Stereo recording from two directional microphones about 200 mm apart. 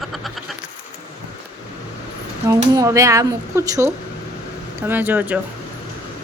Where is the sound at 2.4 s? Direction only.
15° right (ahead or behind).